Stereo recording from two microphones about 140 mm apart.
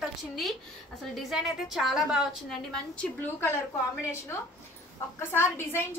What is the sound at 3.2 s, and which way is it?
Speech, 15° left (ahead or behind).